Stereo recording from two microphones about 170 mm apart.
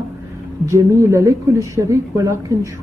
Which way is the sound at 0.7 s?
20° right (ahead or behind).